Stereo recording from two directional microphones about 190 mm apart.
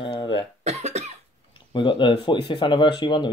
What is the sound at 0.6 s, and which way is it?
Cough, 35° right (ahead or behind).